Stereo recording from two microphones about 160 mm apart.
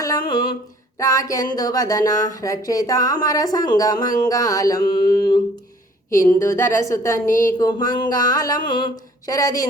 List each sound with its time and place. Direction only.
0.0 s a sound: 25° left (ahead or behind)
0.9 s a woman's voice: 20° left (ahead or behind)
7.3 s speech: 55° left (ahead or behind)
7.6 s speech: 25° left (ahead or behind)